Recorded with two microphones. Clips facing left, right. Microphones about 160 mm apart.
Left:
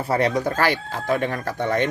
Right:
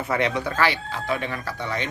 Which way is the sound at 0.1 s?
40° left (ahead or behind).